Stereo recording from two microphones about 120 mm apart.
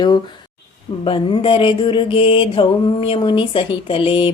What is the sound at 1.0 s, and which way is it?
Mantra, 45° left (ahead or behind).